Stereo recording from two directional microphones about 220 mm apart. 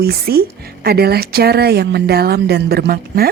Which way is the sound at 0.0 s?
45° right (ahead or behind).